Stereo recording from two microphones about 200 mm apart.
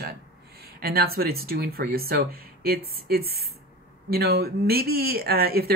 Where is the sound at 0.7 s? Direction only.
50° right (ahead or behind).